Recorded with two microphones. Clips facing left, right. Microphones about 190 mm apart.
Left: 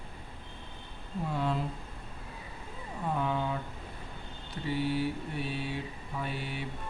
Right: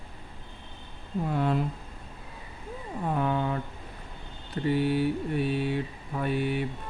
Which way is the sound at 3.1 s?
55° right (ahead or behind).